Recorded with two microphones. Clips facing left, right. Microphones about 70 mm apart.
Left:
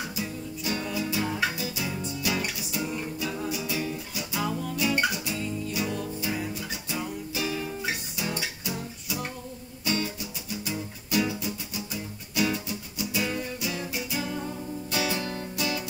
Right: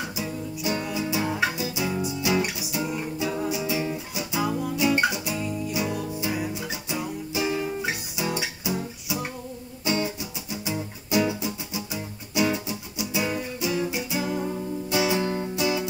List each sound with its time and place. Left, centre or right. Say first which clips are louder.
1.0 s music: right 3 dB; centre